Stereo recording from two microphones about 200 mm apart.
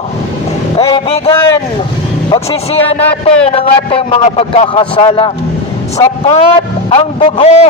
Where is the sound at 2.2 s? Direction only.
30° left (ahead or behind).